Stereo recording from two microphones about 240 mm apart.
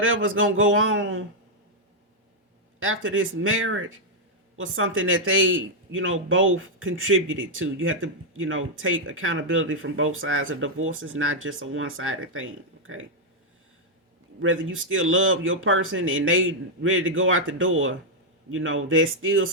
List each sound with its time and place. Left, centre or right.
0.0 s speech: right
2.8 s speech: right
14.4 s speech: right